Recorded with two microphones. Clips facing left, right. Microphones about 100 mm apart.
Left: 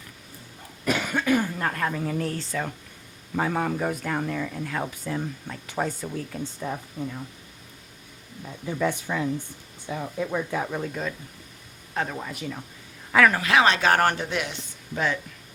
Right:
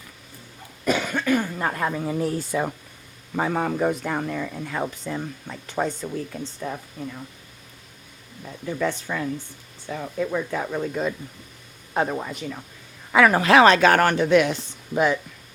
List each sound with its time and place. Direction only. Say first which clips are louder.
1.0 s cough: even; 10° left (ahead or behind)
1.5 s speech: right 2 dB; 10° right (ahead or behind)
3.3 s speech: right 2 dB; 5° right (ahead or behind)
8.4 s speech: right 1 dB; 5° left (ahead or behind)
11.9 s speech: right 5 dB; 20° right (ahead or behind)
12.3 s speech: right 1 dB; 5° left (ahead or behind)
13.1 s a sound: right 2 dB; 5° right (ahead or behind)
13.3 s speech: right 7 dB; 35° right (ahead or behind)
13.7 s speech: right 4 dB; 85° right; by 14.5 s 65° right (ahead or behind)
14.9 s speech: right 6 dB; 15° right (ahead or behind)